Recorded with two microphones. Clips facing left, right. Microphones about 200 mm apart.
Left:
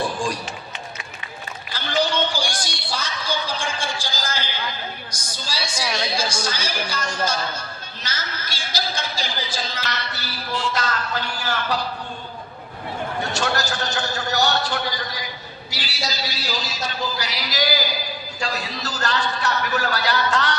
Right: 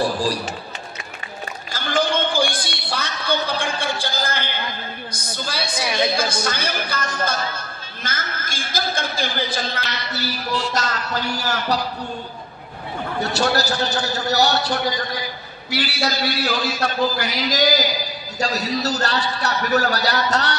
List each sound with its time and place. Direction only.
0.0 s run: 35° right (ahead or behind)
1.7 s a sound: 50° right (ahead or behind)
5.1 s a woman's voice: 55° right (ahead or behind)
10.1 s a man's voice: 40° right (ahead or behind)
13.2 s a man's voice: 40° right (ahead or behind)
15.7 s a woman's voice: 60° right (ahead or behind); by 20.5 s 40° right (ahead or behind)